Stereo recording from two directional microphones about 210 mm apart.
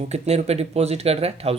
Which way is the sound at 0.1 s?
30° right (ahead or behind).